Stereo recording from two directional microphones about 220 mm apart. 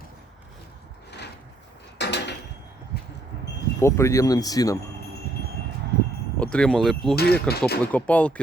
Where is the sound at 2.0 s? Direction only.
50° left (ahead or behind).